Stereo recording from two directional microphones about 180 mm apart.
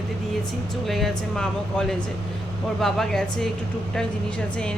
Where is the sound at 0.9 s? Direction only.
Centre (ahead or behind).